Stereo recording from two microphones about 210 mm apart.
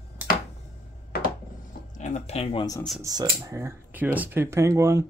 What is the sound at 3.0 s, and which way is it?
Speech, 15° right (ahead or behind).